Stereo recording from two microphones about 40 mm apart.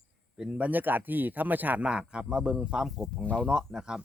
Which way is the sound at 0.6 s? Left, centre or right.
Right.